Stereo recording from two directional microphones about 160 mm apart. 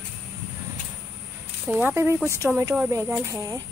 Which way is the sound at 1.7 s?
10° right (ahead or behind).